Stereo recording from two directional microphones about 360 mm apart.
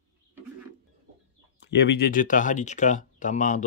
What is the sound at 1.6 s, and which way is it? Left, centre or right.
Speech, left.